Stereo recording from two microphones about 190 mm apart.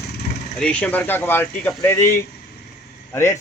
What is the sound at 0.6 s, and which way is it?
Speech, 5° left (ahead or behind).